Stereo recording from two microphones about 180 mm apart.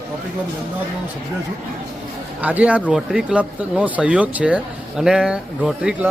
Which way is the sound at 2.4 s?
10° right (ahead or behind).